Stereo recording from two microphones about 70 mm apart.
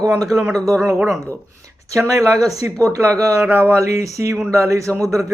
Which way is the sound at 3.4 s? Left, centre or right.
Right.